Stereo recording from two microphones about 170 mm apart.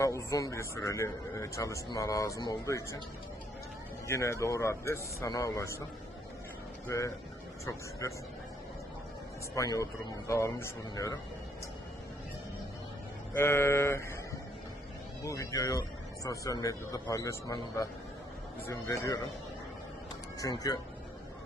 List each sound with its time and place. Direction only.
0.0 s a man's voice: 15° left (ahead or behind)
4.0 s a man's voice: 15° left (ahead or behind)
6.8 s a man's voice: 20° left (ahead or behind)
9.6 s a man's voice: 20° left (ahead or behind)
13.3 s a man's voice: 15° left (ahead or behind)
15.2 s a man's voice: 20° left (ahead or behind)
20.4 s a man's voice: 20° left (ahead or behind)